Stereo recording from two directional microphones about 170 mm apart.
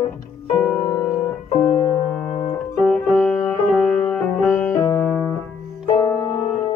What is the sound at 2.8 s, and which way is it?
Music, 5° left (ahead or behind).